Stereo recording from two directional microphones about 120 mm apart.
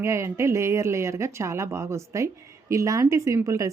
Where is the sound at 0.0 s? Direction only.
25° right (ahead or behind).